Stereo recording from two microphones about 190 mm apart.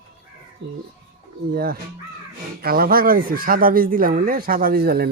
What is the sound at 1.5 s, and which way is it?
Speech, 50° right (ahead or behind).